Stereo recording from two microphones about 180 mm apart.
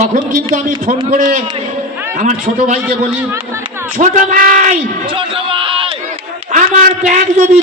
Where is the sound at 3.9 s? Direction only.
45° right (ahead or behind).